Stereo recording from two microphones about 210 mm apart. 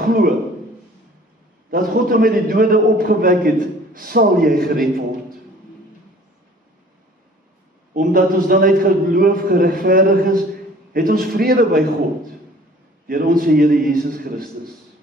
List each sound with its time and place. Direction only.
0.0 s speech: 45° right (ahead or behind)
1.7 s a man's voice: 45° right (ahead or behind)
7.9 s a man's voice: 40° right (ahead or behind)
13.0 s a man's voice: 45° right (ahead or behind)